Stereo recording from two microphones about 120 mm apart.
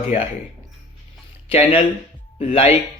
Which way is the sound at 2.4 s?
60° left (ahead or behind).